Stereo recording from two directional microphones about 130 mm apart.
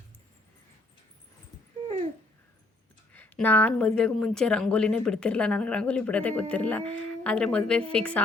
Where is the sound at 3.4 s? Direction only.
15° left (ahead or behind).